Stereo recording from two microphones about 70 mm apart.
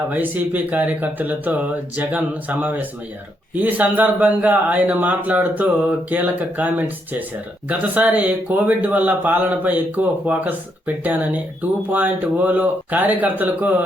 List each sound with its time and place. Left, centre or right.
0.1 s speech: right